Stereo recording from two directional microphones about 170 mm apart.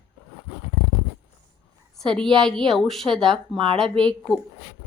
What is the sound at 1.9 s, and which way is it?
Speech, 5° left (ahead or behind).